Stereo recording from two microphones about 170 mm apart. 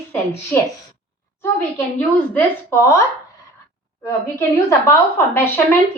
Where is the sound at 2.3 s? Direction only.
15° left (ahead or behind).